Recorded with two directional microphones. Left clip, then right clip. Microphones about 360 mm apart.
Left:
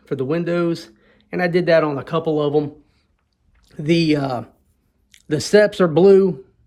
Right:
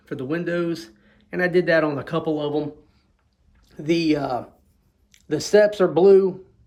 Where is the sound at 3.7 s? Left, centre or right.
Centre.